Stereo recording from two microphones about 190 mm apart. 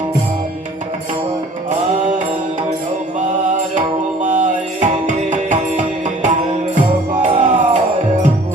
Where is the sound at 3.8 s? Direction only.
40° right (ahead or behind).